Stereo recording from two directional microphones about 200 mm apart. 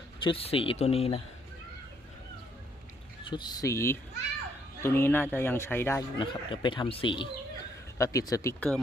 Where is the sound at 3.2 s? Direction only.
20° left (ahead or behind).